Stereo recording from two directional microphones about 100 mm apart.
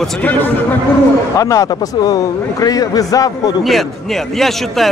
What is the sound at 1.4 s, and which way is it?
A man's voice, 35° left (ahead or behind).